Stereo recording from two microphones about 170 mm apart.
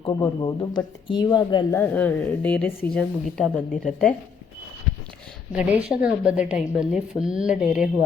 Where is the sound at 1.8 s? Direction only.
10° left (ahead or behind).